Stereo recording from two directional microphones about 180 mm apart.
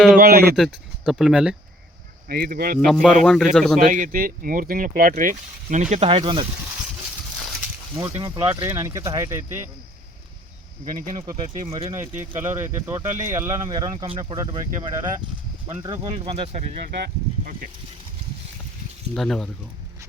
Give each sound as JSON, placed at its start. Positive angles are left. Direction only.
{"t": 0.2, "sound": "speech", "side_deg": -55}
{"t": 0.5, "sound": "speech", "side_deg": 0}
{"t": 2.2, "sound": "speech", "side_deg": -55}
{"t": 2.8, "sound": "speech", "side_deg": 0}
{"t": 3.8, "sound": "speech", "side_deg": -45}
{"t": 7.9, "sound": "speech", "side_deg": -15}
{"t": 10.8, "sound": "speech", "side_deg": -45}
{"t": 12.1, "sound": "speech", "side_deg": -15}
{"t": 15.6, "sound": "speech", "side_deg": -25}
{"t": 17.0, "sound": "speech", "side_deg": -50}
{"t": 19.1, "sound": "speech", "side_deg": 0}